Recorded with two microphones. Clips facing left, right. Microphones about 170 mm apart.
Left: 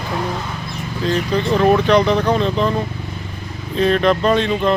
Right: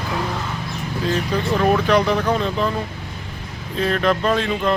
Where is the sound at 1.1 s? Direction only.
5° right (ahead or behind).